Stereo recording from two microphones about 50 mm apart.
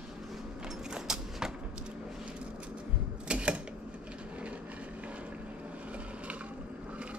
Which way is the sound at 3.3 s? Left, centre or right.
Right.